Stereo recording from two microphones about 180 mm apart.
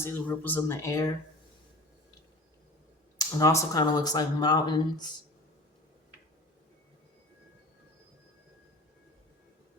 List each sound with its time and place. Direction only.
0.0 s speech: 10° left (ahead or behind)
3.2 s speech: 20° left (ahead or behind)